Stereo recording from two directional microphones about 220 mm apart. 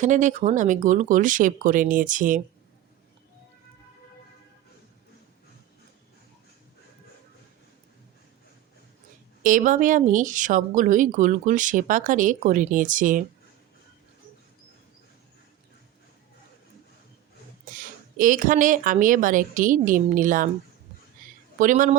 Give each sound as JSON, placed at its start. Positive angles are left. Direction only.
{"t": 0.0, "sound": "speech", "side_deg": -35}
{"t": 9.4, "sound": "speech", "side_deg": -35}
{"t": 17.7, "sound": "speech", "side_deg": -40}
{"t": 21.6, "sound": "speech", "side_deg": -35}